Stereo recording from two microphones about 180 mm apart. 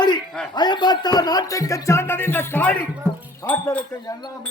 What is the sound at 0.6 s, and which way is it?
Speech, 25° left (ahead or behind).